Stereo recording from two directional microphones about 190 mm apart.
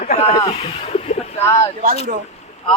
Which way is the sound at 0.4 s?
35° left (ahead or behind).